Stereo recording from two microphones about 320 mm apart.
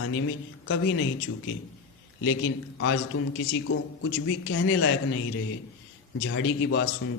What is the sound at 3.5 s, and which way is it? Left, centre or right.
A man's voice, left.